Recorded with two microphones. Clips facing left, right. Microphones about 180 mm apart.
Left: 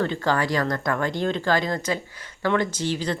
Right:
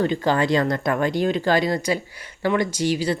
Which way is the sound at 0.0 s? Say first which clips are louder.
Right 3 dB; 15° right (ahead or behind).